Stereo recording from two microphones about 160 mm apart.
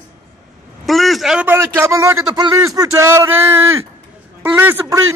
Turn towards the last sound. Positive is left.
turn(degrees=-15)  # may be behind; listen again after turning